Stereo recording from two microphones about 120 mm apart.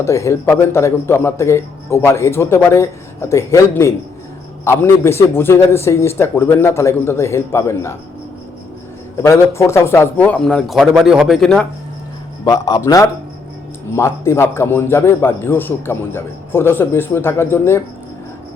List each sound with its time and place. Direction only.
0.0 s a man's voice: 25° left (ahead or behind)
9.2 s a man's voice: 25° left (ahead or behind); by 11.6 s 5° left (ahead or behind)
12.5 s a man's voice: 30° left (ahead or behind)